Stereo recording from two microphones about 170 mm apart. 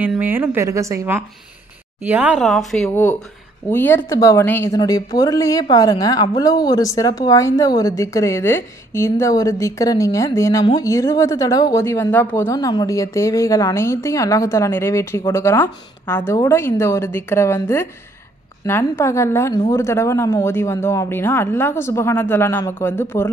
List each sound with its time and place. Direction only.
0.0 s a woman's voice: 10° right (ahead or behind); by 23.3 s 15° left (ahead or behind)